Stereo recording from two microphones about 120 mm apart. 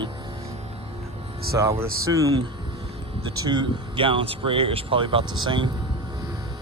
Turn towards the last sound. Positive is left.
turn(degrees=-40)  # may be behind; listen again after turning